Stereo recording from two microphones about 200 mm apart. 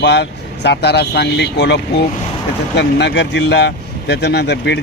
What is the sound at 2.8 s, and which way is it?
Speech, 60° left (ahead or behind).